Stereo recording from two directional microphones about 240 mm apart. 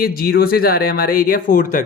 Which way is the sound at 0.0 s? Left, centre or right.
Left.